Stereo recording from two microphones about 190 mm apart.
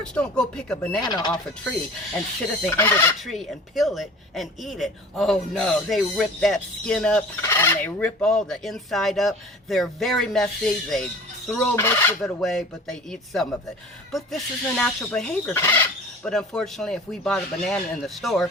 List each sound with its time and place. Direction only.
0.0 s fowl: 5° left (ahead or behind)
0.9 s speech: 20° left (ahead or behind)
2.6 s fowl: 10° left (ahead or behind)
3.2 s fowl: centre (ahead or behind)
12.2 s fowl: centre (ahead or behind)